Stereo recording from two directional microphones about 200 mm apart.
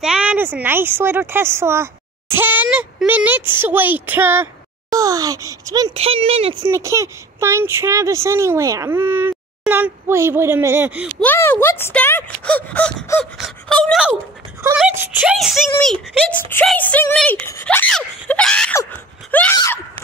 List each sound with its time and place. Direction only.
0.0 s speech: 5° right (ahead or behind)
5.9 s speech: 30° right (ahead or behind)
6.6 s speech: 15° right (ahead or behind)
11.1 s a sound: 10° left (ahead or behind)
15.0 s speech: 5° right (ahead or behind); by 19.8 s 15° left (ahead or behind)